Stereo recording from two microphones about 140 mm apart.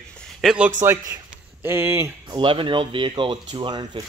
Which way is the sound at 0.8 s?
25° right (ahead or behind).